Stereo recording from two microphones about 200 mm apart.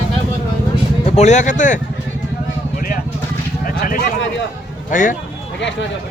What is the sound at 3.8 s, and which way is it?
Speech, 45° left (ahead or behind).